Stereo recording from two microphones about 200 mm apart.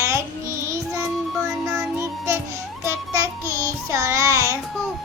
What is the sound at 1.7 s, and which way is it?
Child singing, 15° right (ahead or behind).